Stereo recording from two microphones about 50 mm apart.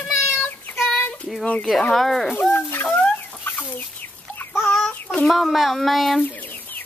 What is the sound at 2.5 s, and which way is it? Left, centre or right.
Chicken, left.